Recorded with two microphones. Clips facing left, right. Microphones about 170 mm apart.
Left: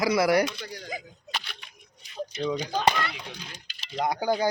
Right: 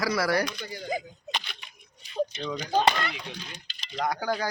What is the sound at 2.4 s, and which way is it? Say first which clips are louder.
Speech: left 5 dB; 15° left (ahead or behind).